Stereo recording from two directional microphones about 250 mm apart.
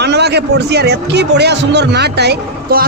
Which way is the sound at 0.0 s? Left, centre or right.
Right.